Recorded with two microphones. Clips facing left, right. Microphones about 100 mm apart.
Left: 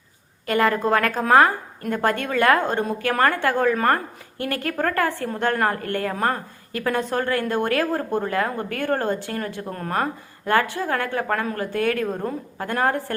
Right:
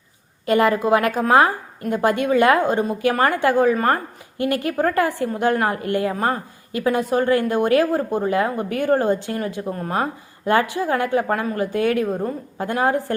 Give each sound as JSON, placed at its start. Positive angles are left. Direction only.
{"t": 0.4, "sound": "a woman's voice", "side_deg": -20}
{"t": 12.0, "sound": "a woman's voice", "side_deg": -10}